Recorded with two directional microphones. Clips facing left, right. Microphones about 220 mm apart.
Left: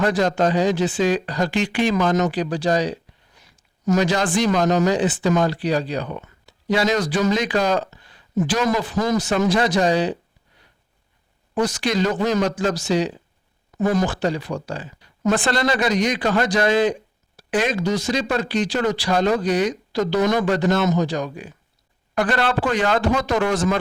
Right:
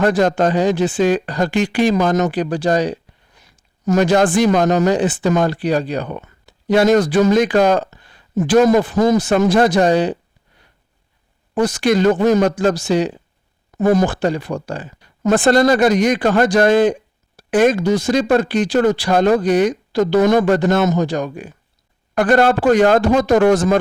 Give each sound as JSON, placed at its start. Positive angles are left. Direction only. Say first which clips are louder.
{"t": 0.0, "sound": "speech", "louder": "right 4 dB", "side_deg": -50}
{"t": 11.5, "sound": "speech", "louder": "right 5 dB", "side_deg": -50}